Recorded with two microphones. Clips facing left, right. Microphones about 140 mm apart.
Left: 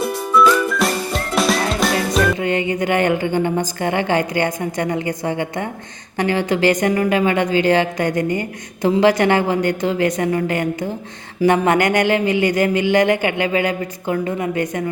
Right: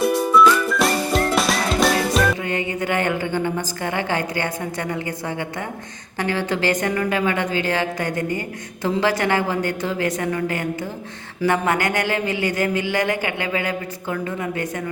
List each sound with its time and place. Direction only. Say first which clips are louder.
0.8 s whistling: right 1 dB; centre (ahead or behind)
2.4 s a woman's voice: left 5 dB; 20° left (ahead or behind)